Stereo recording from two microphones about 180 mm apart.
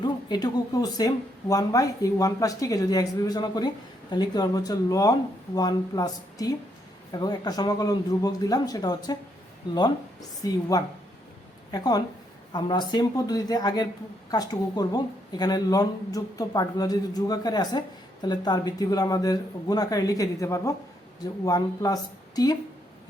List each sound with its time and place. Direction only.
0.0 s speech: 25° left (ahead or behind)